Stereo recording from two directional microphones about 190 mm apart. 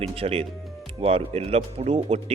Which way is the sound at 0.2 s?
30° right (ahead or behind).